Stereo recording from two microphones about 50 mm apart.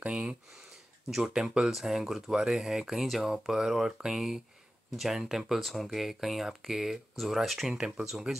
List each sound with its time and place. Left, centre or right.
0.1 s speech: centre